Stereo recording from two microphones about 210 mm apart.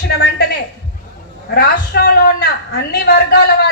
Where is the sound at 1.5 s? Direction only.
45° left (ahead or behind).